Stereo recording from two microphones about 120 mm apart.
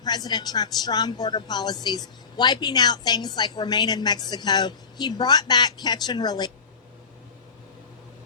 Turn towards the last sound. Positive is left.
turn(degrees=35)  # may be behind; listen again after turning